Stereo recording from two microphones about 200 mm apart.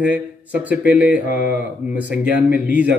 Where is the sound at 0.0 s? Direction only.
5° right (ahead or behind).